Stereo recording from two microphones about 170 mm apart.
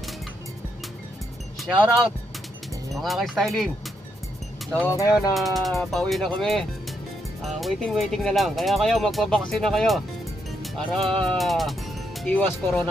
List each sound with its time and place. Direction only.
3.0 s speech: centre (ahead or behind)
4.7 s speech: 15° left (ahead or behind)
5.3 s speech: centre (ahead or behind)